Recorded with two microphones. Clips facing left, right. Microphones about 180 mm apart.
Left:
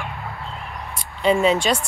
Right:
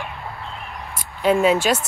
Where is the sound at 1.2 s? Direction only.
5° right (ahead or behind).